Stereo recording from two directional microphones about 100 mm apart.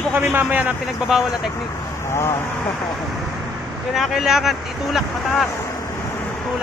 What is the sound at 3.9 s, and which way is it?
Speech, 5° right (ahead or behind).